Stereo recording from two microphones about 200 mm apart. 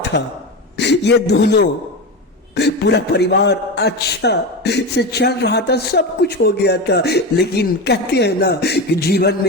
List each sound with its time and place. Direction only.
0.1 s a man's voice: 55° left (ahead or behind)